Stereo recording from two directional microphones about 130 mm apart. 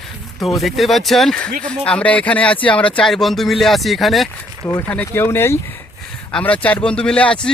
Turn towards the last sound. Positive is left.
turn(degrees=10)  # may be behind; listen again after turning